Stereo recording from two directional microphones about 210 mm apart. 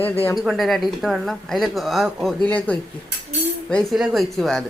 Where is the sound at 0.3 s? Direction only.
Centre (ahead or behind).